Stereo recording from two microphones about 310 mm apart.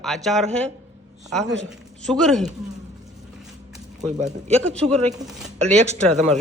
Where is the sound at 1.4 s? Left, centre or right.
Right.